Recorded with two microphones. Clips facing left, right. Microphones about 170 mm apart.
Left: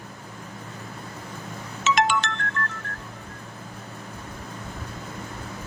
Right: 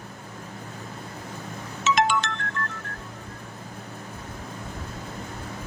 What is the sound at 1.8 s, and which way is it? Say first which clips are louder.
Music: even; 70° left (ahead or behind).